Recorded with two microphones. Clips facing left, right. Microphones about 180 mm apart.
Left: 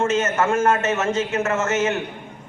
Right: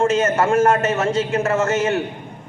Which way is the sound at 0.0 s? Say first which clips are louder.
Right 3 dB; 30° right (ahead or behind).